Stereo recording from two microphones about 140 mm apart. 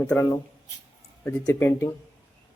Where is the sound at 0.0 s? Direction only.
15° left (ahead or behind).